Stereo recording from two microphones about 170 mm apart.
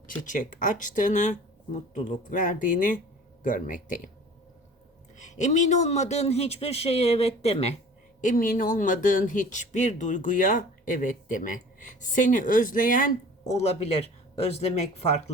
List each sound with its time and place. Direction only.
0.3 s speech: 50° left (ahead or behind)
5.1 s a man's voice: 45° left (ahead or behind)
8.2 s speech: 50° left (ahead or behind)
13.5 s a man's voice: 40° left (ahead or behind)